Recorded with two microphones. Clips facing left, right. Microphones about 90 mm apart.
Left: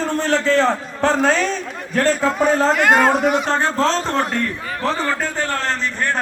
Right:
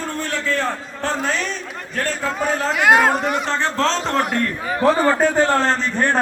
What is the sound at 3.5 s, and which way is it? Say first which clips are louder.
Speech: left 2 dB; 10° left (ahead or behind).